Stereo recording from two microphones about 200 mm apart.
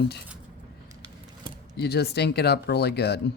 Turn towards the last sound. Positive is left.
turn(degrees=55)  # may be behind; listen again after turning